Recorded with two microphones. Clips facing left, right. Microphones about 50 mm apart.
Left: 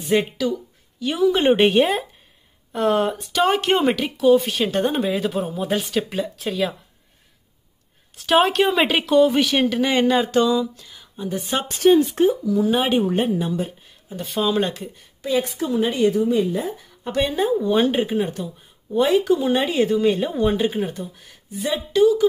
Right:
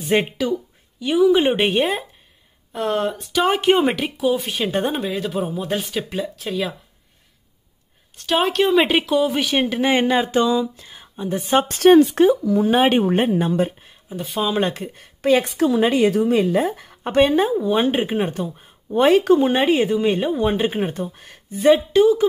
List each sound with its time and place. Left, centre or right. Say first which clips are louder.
0.0 s speech: right 1 dB; right
0.5 s a woman's voice: right 2 dB; centre
8.2 s speech: left 2 dB; centre
9.6 s speech: even; centre
11.6 s speech: right 3 dB; right
12.4 s speech: right 3 dB; right
14.1 s speech: even; centre
14.6 s speech: right 2 dB; right
15.0 s a woman's voice: right 5 dB; right
17.0 s speech: right 5 dB; right
17.7 s speech: even; right
20.2 s speech: right 1 dB; centre
20.5 s speech: right 1 dB; right